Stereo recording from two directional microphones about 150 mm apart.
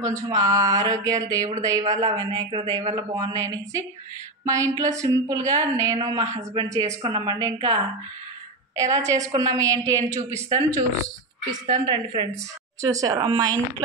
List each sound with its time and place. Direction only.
0.0 s a woman's voice: 20° right (ahead or behind)